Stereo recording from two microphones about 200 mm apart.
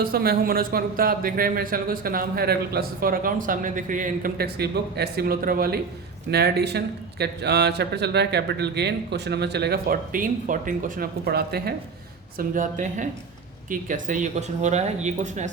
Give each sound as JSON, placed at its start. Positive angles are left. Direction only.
{"t": 0.0, "sound": "speech", "side_deg": -50}
{"t": 12.4, "sound": "speech", "side_deg": -40}